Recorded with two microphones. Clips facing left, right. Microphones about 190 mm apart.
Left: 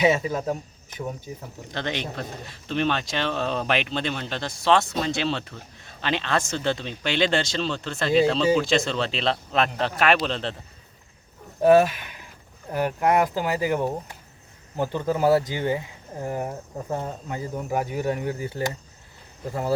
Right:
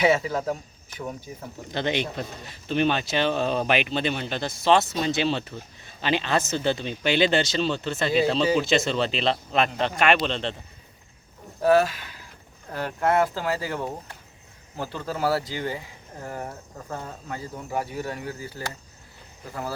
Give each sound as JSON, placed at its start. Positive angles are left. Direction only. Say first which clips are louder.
{"t": 0.0, "sound": "speech", "louder": "even", "side_deg": 20}
{"t": 1.7, "sound": "speech", "louder": "right 3 dB", "side_deg": -5}
{"t": 11.6, "sound": "speech", "louder": "left 3 dB", "side_deg": 20}